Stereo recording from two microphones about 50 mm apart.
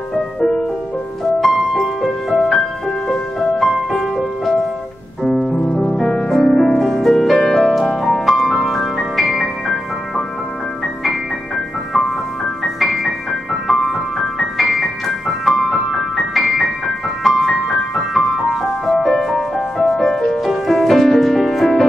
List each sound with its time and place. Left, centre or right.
1.4 s music: centre
5.8 s music: centre
6.8 s music: centre
11.1 s music: centre